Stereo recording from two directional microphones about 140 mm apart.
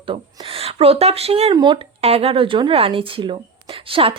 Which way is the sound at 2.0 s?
45° right (ahead or behind).